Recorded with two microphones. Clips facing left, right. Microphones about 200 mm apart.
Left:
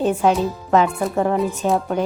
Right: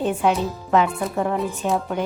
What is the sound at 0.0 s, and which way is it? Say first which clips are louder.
Speech: left 3 dB; 40° left (ahead or behind).